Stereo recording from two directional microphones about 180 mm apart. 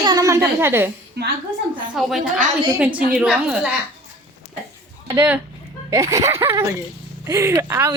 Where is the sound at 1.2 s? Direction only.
65° right (ahead or behind).